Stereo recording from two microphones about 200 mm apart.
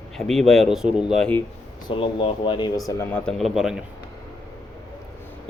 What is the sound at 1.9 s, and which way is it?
Speech, 25° left (ahead or behind).